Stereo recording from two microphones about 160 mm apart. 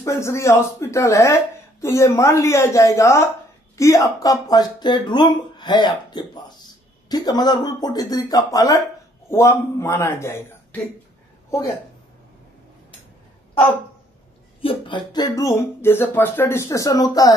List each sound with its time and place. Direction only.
0.0 s speech: 15° left (ahead or behind)
14.6 s speech: 30° left (ahead or behind)